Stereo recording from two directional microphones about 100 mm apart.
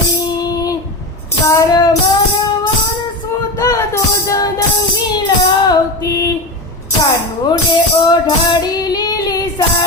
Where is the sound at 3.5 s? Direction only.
30° left (ahead or behind).